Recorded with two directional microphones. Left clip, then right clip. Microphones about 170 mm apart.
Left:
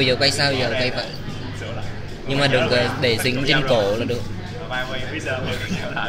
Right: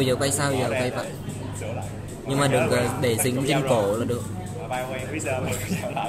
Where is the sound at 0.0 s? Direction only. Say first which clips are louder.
Left 6 dB; 30° right (ahead or behind).